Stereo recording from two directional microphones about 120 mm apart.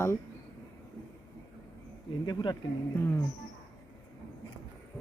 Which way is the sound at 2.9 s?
20° left (ahead or behind).